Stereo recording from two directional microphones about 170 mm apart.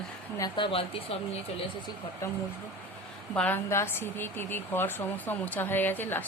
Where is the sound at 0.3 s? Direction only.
25° left (ahead or behind).